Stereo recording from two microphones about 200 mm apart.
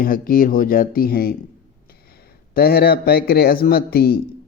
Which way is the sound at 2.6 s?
50° left (ahead or behind).